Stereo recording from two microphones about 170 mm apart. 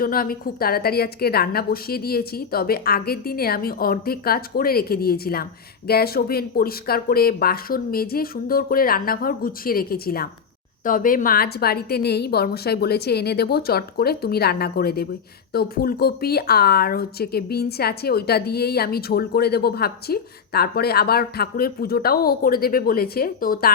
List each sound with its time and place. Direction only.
0.0 s a woman's voice: 60° left (ahead or behind)